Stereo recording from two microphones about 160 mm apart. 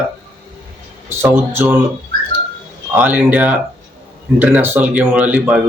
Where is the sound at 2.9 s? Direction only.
10° right (ahead or behind).